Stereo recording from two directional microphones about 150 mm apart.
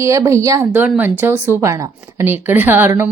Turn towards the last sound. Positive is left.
turn(degrees=-15)  # may be behind; listen again after turning